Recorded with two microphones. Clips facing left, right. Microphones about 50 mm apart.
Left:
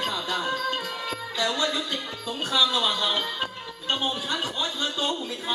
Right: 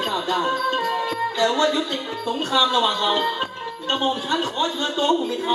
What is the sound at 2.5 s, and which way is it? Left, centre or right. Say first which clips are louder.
Speech: right 4 dB; centre.